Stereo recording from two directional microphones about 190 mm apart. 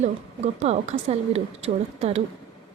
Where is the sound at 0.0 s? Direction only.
35° right (ahead or behind).